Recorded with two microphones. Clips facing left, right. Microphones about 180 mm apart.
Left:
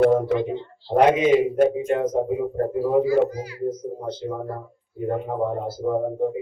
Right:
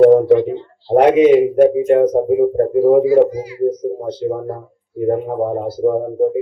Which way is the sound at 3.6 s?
65° right (ahead or behind).